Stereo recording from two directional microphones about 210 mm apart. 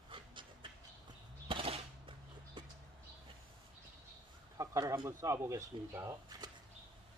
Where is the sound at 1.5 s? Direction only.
25° right (ahead or behind).